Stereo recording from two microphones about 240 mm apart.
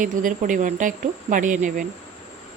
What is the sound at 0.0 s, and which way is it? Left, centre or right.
Speech, right.